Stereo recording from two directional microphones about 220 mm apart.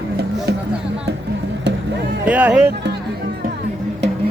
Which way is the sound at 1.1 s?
50° right (ahead or behind).